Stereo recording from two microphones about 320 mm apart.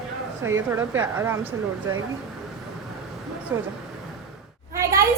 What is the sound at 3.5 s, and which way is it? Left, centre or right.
Speech, centre.